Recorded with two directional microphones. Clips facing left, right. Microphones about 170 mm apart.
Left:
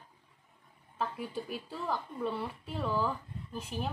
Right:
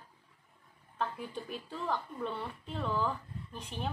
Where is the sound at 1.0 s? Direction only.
5° left (ahead or behind).